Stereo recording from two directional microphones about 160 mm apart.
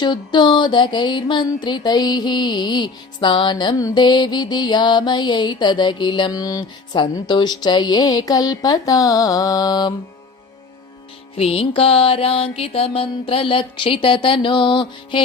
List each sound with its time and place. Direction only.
0.0 s music: 30° left (ahead or behind)
11.3 s music: 40° left (ahead or behind)